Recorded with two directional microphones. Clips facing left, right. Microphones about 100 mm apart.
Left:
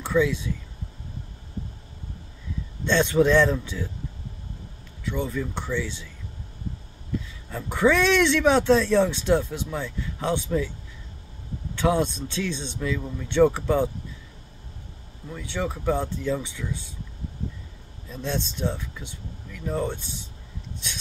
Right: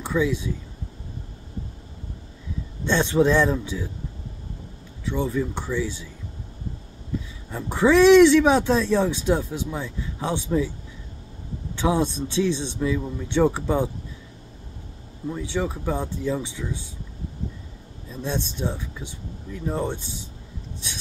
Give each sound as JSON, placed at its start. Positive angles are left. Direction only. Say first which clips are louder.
{"t": 0.0, "sound": "speech", "louder": "left 1 dB", "side_deg": -15}
{"t": 2.8, "sound": "speech", "louder": "even", "side_deg": -15}
{"t": 5.0, "sound": "speech", "louder": "right 3 dB", "side_deg": -15}
{"t": 7.5, "sound": "speech", "louder": "right 3 dB", "side_deg": -20}
{"t": 11.7, "sound": "speech", "louder": "even", "side_deg": -15}
{"t": 15.3, "sound": "speech", "louder": "right 2 dB", "side_deg": -15}
{"t": 18.1, "sound": "speech", "louder": "right 1 dB", "side_deg": -15}